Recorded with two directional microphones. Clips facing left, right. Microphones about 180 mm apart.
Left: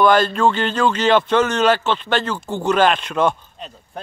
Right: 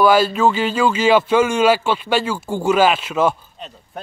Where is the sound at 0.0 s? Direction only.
5° right (ahead or behind).